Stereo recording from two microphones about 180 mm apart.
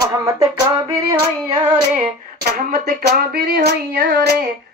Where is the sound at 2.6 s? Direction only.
60° right (ahead or behind).